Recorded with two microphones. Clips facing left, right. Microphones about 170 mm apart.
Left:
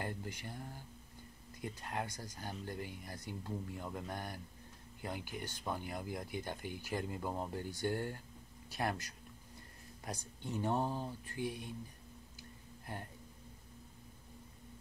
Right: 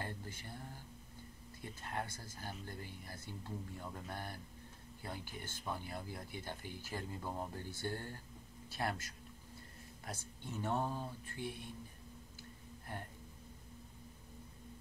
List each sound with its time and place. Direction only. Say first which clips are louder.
0.0 s speech: left 4 dB; 15° left (ahead or behind)
10.0 s speech: left 4 dB; 15° left (ahead or behind)
12.4 s music: right 1 dB; 15° left (ahead or behind)